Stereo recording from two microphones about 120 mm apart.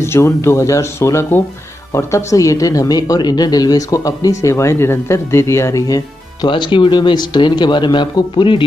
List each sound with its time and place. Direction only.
0.0 s speech: 20° left (ahead or behind)
6.5 s speech: 40° left (ahead or behind)